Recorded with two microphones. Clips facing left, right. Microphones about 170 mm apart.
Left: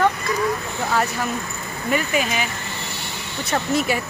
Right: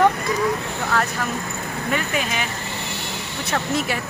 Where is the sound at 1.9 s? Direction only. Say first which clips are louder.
Left 3 dB; 5° left (ahead or behind).